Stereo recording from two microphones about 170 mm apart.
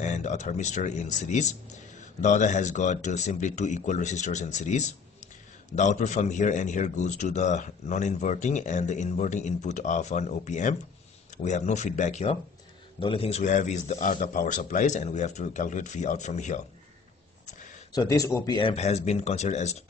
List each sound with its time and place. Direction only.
0.0 s speech: 45° left (ahead or behind)
17.9 s speech: 20° left (ahead or behind); by 19.8 s 40° left (ahead or behind)